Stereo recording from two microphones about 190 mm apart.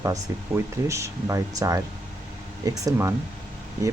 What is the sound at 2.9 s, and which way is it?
Speech, 15° right (ahead or behind).